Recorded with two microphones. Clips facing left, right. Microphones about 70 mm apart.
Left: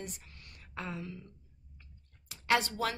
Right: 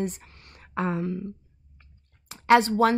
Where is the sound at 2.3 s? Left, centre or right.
Right.